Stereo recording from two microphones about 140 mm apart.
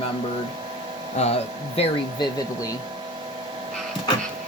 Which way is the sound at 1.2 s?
50° left (ahead or behind).